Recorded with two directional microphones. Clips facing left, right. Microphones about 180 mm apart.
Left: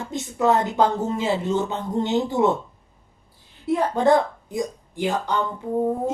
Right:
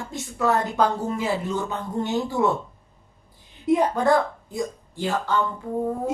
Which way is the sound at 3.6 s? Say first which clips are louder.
Right 2 dB; 15° right (ahead or behind).